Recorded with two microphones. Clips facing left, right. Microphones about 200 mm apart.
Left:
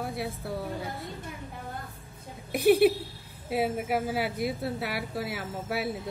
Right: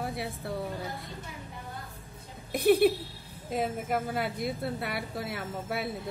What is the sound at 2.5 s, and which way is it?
A woman's voice, 5° left (ahead or behind).